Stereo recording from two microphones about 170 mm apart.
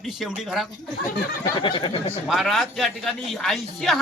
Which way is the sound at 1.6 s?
30° left (ahead or behind).